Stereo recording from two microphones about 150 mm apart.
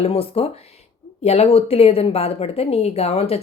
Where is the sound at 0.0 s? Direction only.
40° left (ahead or behind).